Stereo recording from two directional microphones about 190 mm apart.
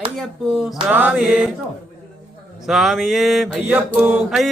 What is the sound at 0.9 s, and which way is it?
Speech, 5° right (ahead or behind).